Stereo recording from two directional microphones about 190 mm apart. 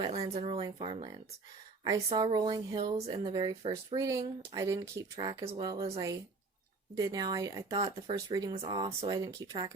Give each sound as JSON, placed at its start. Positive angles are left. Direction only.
{"t": 0.3, "sound": "speech", "side_deg": -30}